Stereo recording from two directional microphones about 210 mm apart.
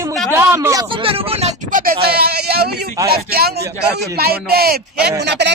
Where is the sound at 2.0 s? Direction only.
50° right (ahead or behind).